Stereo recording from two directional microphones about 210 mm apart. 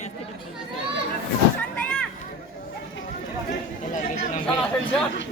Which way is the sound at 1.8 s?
5° left (ahead or behind).